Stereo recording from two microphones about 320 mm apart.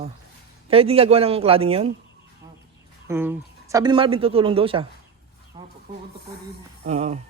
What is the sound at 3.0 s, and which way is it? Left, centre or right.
A man's voice, centre.